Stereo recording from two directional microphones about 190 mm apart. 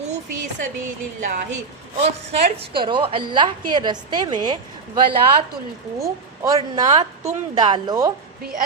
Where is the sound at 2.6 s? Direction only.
25° right (ahead or behind).